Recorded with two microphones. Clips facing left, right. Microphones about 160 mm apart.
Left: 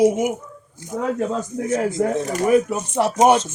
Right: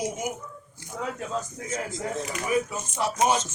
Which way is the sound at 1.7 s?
60° left (ahead or behind).